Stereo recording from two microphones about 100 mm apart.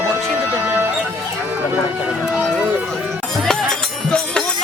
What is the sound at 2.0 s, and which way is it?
Speech, 5° right (ahead or behind).